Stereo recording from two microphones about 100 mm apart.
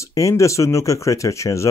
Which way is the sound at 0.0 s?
30° left (ahead or behind).